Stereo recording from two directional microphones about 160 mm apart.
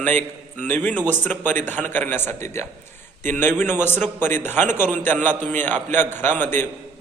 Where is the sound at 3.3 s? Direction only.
15° left (ahead or behind).